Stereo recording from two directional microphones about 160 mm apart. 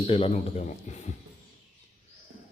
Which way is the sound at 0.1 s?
40° left (ahead or behind).